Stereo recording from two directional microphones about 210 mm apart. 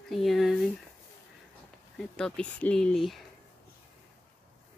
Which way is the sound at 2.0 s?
5° left (ahead or behind).